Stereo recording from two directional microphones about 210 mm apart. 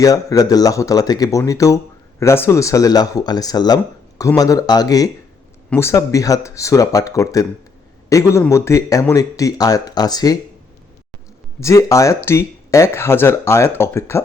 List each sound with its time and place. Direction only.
0.0 s speech: 15° left (ahead or behind)
11.6 s speech: 15° left (ahead or behind)